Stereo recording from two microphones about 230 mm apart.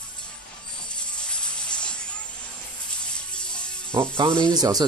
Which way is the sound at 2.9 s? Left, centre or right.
Centre.